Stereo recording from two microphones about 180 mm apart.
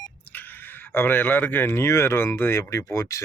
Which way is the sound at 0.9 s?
10° left (ahead or behind).